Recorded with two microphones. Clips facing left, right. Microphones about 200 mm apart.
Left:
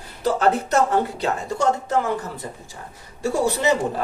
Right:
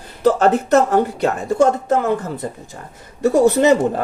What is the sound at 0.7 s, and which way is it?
A woman's voice, 55° right (ahead or behind).